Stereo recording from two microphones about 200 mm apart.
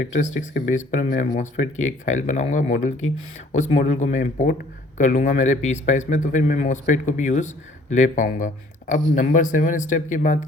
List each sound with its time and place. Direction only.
0.1 s a man's voice: 40° left (ahead or behind)